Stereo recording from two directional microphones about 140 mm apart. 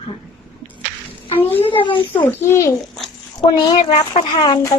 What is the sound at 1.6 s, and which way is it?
Speech, 40° left (ahead or behind).